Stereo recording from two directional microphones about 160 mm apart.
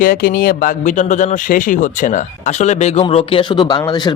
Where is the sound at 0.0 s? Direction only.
65° left (ahead or behind).